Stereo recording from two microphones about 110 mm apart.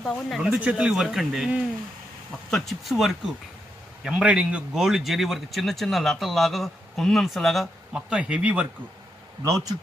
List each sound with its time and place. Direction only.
0.0 s speech: 5° left (ahead or behind)
2.5 s speech: centre (ahead or behind)
9.4 s speech: 35° right (ahead or behind)